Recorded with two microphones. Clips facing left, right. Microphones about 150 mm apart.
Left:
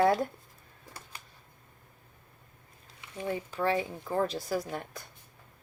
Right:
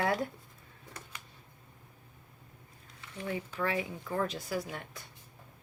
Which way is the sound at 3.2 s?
30° left (ahead or behind).